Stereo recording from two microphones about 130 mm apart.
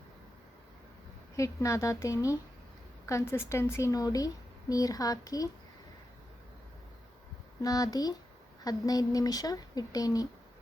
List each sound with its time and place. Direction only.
1.4 s speech: 25° left (ahead or behind)
7.6 s speech: 30° left (ahead or behind)